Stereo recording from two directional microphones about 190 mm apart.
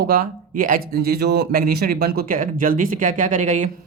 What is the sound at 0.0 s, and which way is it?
Speech, 50° right (ahead or behind).